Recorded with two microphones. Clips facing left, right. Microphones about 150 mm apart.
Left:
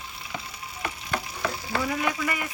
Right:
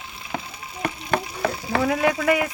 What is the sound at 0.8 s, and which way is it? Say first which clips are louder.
Stir: right 7 dB; 60° right (ahead or behind).